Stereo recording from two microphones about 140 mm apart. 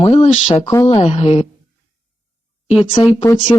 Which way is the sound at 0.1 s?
45° left (ahead or behind).